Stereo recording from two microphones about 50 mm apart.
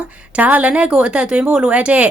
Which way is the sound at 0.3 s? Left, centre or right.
Right.